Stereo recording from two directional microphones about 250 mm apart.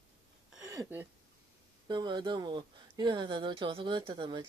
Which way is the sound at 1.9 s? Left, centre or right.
Centre.